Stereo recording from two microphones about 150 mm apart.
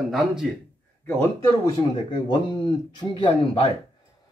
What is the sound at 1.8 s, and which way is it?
Speech, 30° left (ahead or behind).